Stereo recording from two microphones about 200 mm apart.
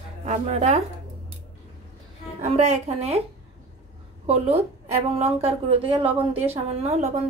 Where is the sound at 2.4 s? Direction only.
35° right (ahead or behind).